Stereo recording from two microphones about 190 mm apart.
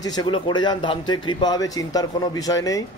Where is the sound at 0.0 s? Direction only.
20° left (ahead or behind).